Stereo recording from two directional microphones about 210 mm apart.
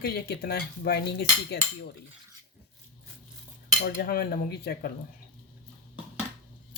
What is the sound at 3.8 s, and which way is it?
Speech, 45° left (ahead or behind).